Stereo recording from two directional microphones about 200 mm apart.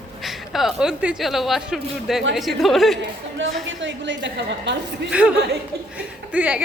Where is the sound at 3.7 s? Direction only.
65° right (ahead or behind).